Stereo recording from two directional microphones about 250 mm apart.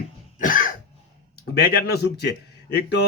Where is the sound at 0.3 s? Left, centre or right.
Left.